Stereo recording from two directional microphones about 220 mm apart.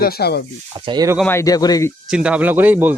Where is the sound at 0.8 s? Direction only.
20° right (ahead or behind).